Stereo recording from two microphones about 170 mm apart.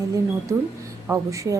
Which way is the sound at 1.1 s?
20° right (ahead or behind).